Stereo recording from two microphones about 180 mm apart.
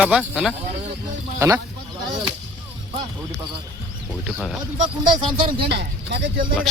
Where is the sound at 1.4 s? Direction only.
15° right (ahead or behind).